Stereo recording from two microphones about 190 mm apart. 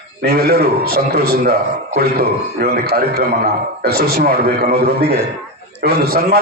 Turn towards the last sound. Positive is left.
turn(degrees=-55)  # may be behind; listen again after turning